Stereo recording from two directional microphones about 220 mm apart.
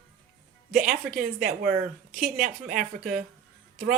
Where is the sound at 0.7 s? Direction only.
40° right (ahead or behind).